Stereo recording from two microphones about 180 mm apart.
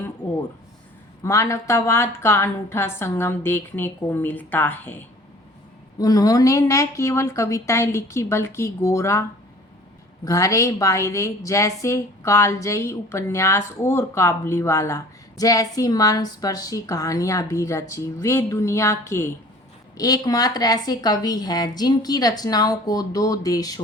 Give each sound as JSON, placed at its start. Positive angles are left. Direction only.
{"t": 1.2, "sound": "a woman's voice", "side_deg": 15}
{"t": 10.2, "sound": "a woman's voice", "side_deg": 20}